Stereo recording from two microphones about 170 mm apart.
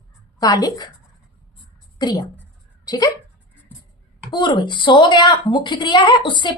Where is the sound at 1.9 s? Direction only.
25° left (ahead or behind).